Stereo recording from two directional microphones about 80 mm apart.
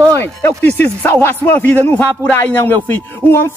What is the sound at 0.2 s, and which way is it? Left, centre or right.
Speech, left.